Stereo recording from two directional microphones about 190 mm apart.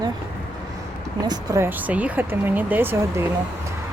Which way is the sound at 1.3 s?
20° right (ahead or behind).